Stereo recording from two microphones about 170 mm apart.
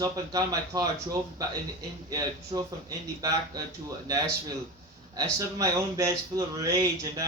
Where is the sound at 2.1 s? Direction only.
20° right (ahead or behind).